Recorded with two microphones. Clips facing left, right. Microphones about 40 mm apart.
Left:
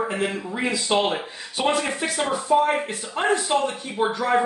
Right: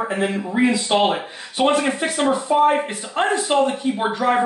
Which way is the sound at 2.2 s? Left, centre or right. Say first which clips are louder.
Right 4 dB; right.